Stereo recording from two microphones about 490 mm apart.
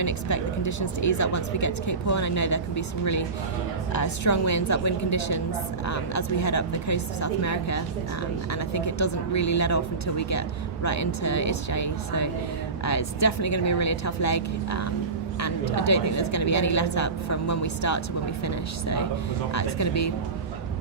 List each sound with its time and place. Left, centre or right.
0.0 s speech: left